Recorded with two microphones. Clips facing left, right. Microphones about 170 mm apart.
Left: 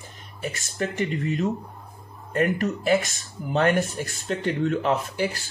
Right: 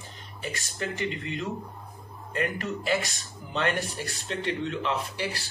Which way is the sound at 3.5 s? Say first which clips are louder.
Left 7 dB; 50° left (ahead or behind).